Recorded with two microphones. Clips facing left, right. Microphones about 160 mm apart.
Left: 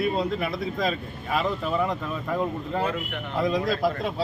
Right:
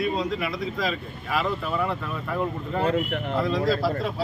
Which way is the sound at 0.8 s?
25° left (ahead or behind).